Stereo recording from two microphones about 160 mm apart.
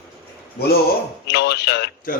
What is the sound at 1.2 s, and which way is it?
Speech, 90° left.